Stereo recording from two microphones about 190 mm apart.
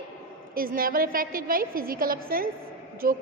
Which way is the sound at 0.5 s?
50° right (ahead or behind).